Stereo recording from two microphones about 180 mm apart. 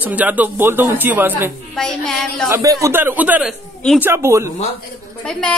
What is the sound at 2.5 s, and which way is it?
A man's voice, 20° right (ahead or behind).